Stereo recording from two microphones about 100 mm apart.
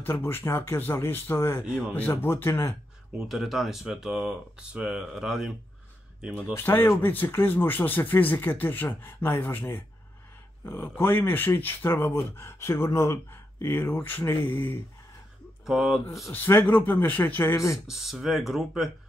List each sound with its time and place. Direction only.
0.0 s speech: 20° left (ahead or behind)
3.2 s speech: centre (ahead or behind)
6.5 s speech: 20° left (ahead or behind)
15.6 s speech: 5° right (ahead or behind)
16.3 s speech: 20° left (ahead or behind)
17.8 s speech: 5° right (ahead or behind)